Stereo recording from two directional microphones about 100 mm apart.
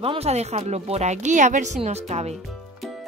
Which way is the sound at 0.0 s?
75° right (ahead or behind).